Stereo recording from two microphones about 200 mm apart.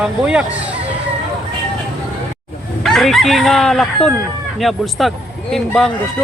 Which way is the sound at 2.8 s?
Centre (ahead or behind).